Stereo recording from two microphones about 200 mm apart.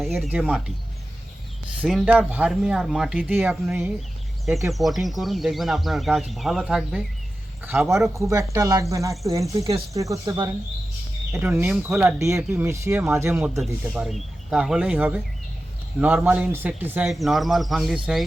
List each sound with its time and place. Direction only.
0.0 s speech: centre (ahead or behind)
1.8 s speech: 5° right (ahead or behind)
13.6 s speech: centre (ahead or behind)